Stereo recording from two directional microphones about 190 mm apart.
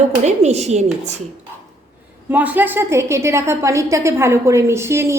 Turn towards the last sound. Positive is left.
turn(degrees=-15)  # may be behind; listen again after turning